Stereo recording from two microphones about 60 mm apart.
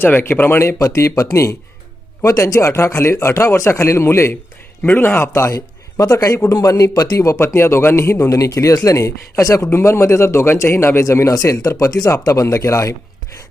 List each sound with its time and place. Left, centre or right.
0.0 s speech: left
0.8 s speech: left
4.9 s speech: left
5.3 s speech: left
6.0 s speech: left
7.3 s speech: left
8.3 s speech: left
9.7 s speech: left
11.3 s speech: left